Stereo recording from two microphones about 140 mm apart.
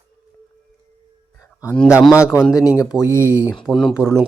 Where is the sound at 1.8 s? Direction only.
10° right (ahead or behind).